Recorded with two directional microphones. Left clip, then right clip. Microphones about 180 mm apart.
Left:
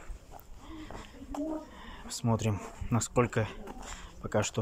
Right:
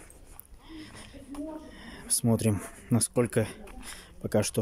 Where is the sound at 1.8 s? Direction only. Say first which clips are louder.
Right 5 dB; 30° right (ahead or behind).